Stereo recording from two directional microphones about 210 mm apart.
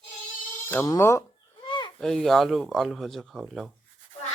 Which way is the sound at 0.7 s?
10° left (ahead or behind).